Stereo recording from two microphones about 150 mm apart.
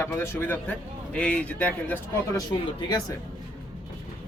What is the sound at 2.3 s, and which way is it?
Speech, 25° left (ahead or behind).